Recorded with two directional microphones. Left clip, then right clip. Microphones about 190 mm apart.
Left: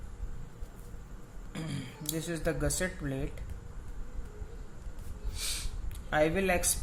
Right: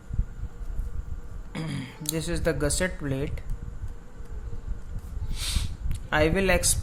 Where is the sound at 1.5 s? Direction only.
25° right (ahead or behind).